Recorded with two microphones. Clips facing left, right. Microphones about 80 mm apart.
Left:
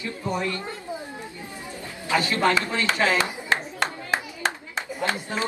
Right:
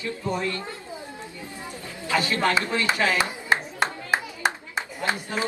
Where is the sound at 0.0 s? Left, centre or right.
Left.